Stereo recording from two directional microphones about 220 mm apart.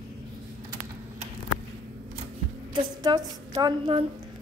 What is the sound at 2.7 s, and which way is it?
A woman's voice, 20° right (ahead or behind).